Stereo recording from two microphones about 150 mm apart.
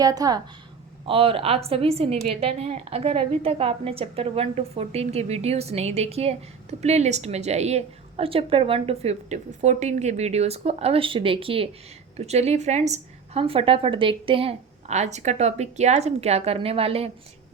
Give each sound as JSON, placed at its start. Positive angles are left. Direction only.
{"t": 0.0, "sound": "a woman's voice", "side_deg": -25}
{"t": 1.0, "sound": "a woman's voice", "side_deg": -40}